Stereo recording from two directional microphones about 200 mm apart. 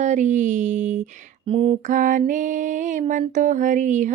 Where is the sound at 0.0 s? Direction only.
35° right (ahead or behind).